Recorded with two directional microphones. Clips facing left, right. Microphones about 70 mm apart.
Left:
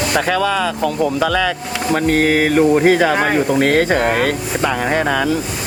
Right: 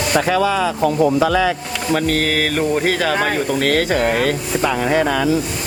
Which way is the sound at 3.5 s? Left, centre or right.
Left.